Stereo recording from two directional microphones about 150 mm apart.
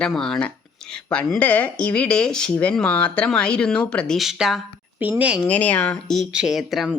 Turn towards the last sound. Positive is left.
turn(degrees=0)  # may be behind; listen again after turning